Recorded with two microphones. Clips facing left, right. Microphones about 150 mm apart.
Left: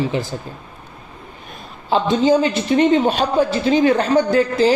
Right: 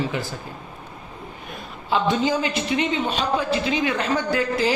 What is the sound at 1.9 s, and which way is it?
Speech, 30° left (ahead or behind).